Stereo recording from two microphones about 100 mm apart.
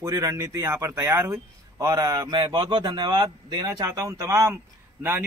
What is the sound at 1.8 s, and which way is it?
Speech, 40° right (ahead or behind).